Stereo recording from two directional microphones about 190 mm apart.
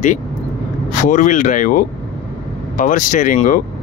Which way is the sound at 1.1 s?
40° left (ahead or behind).